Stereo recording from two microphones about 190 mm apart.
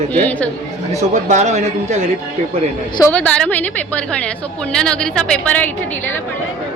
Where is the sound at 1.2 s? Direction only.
35° right (ahead or behind).